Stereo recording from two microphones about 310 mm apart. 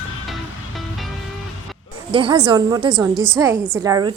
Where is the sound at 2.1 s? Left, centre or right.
Centre.